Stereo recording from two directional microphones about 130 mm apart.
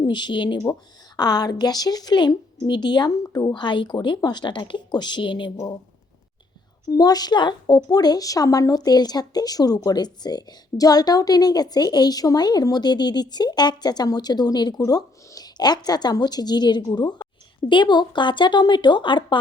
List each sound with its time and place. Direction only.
0.0 s speech: 35° left (ahead or behind)
6.9 s speech: 30° left (ahead or behind)